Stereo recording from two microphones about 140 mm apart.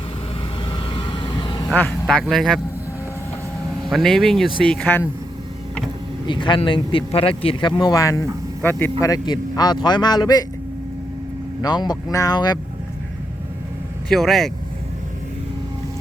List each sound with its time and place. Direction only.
0.7 s vehicle: 35° left (ahead or behind)
1.7 s speech: 10° left (ahead or behind)
3.8 s speech: centre (ahead or behind)
6.2 s a man's voice: 35° left (ahead or behind)
7.8 s a man's voice: 25° left (ahead or behind)
11.6 s a man's voice: 30° left (ahead or behind)
14.1 s speech: centre (ahead or behind)